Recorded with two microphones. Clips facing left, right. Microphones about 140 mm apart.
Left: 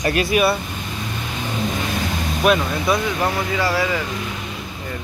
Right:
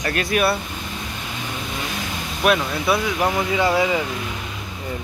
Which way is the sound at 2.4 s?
5° right (ahead or behind).